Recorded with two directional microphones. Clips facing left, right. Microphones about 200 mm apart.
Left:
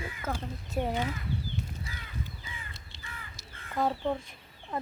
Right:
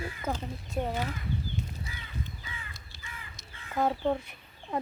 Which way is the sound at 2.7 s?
25° left (ahead or behind).